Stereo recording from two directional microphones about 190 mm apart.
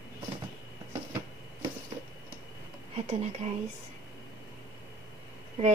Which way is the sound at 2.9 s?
35° right (ahead or behind).